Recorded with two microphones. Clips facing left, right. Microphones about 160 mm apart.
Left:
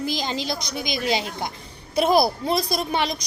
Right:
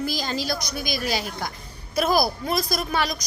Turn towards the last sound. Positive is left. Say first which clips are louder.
# left 1 dB
turn(degrees=25)  # may be behind; listen again after turning